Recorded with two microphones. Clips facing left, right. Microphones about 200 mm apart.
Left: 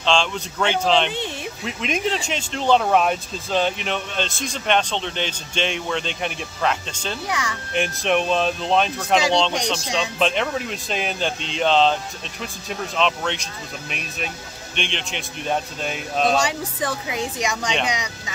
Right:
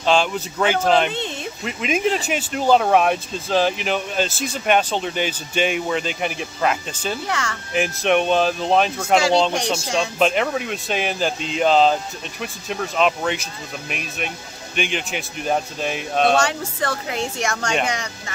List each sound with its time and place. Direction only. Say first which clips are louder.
0.0 s speech: right 3 dB; 5° right (ahead or behind)
1.1 s speech: right 1 dB; 15° left (ahead or behind)
1.6 s speech: right 3 dB; centre (ahead or behind)
7.2 s a woman's voice: right 1 dB; 15° left (ahead or behind)
7.7 s speech: right 2 dB; centre (ahead or behind)
16.3 s a woman's voice: right 2 dB; 15° left (ahead or behind)